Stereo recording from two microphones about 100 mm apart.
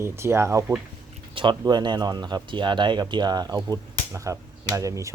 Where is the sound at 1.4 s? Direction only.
50° right (ahead or behind).